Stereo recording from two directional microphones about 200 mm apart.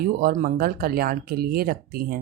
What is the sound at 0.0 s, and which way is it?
Speech, 50° right (ahead or behind).